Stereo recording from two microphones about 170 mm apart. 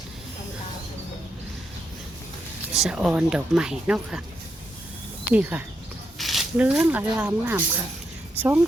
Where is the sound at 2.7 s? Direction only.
Centre (ahead or behind).